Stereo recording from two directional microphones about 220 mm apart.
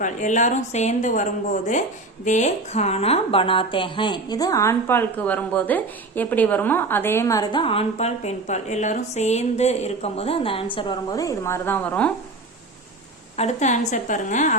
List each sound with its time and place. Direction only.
0.0 s a woman's voice: 35° left (ahead or behind); by 12.1 s 10° left (ahead or behind)
13.3 s speech: 30° left (ahead or behind)